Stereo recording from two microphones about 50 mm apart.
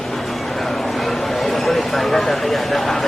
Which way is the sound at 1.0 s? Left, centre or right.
Centre.